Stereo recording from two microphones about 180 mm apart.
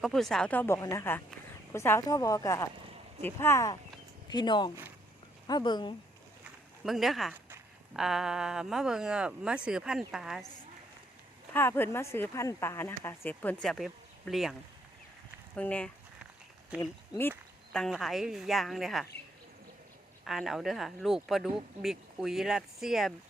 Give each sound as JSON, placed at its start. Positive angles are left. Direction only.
{"t": 0.0, "sound": "speech", "side_deg": 0}
{"t": 6.4, "sound": "a sound", "side_deg": 0}
{"t": 7.9, "sound": "speech", "side_deg": -5}
{"t": 11.5, "sound": "speech", "side_deg": 10}
{"t": 15.5, "sound": "speech", "side_deg": 10}
{"t": 17.2, "sound": "speech", "side_deg": 5}
{"t": 20.2, "sound": "speech", "side_deg": 0}